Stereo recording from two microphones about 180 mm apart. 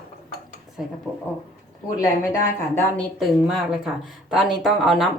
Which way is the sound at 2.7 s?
15° left (ahead or behind).